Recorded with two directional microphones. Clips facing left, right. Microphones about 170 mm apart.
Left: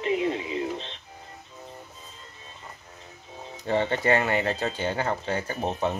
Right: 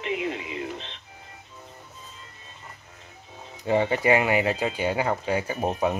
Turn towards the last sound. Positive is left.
turn(degrees=-10)  # may be behind; listen again after turning